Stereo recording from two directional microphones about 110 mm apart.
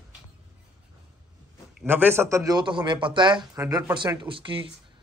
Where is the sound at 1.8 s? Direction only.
20° right (ahead or behind).